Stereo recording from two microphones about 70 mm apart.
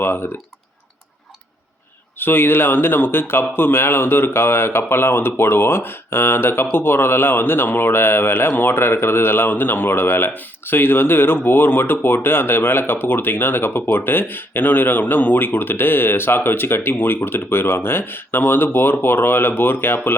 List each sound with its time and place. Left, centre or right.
0.0 s speech: left
2.1 s speech: left